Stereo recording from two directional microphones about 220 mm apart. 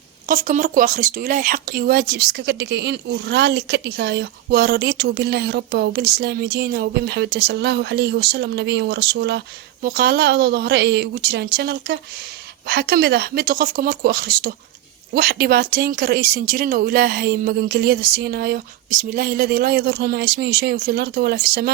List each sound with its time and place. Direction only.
0.3 s speech: 35° right (ahead or behind)